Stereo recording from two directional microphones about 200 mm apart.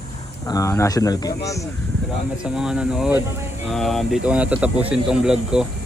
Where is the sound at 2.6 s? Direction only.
5° right (ahead or behind).